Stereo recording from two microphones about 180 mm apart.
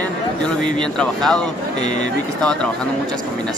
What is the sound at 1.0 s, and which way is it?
Speech, 5° left (ahead or behind).